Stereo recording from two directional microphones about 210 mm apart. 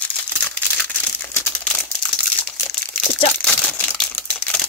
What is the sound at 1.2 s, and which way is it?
Crumpling, 5° left (ahead or behind).